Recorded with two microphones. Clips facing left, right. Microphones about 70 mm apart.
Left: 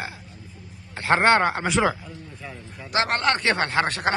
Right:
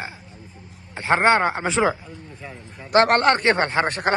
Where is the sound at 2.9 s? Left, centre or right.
Right.